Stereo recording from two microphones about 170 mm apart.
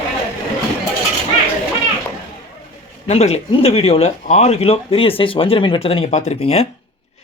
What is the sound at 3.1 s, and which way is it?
Speech, 40° left (ahead or behind).